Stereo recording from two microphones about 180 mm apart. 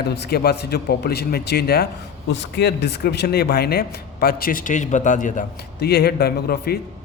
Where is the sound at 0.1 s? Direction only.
65° left (ahead or behind).